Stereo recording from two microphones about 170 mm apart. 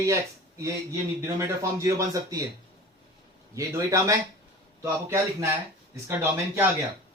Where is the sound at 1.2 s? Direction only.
15° right (ahead or behind).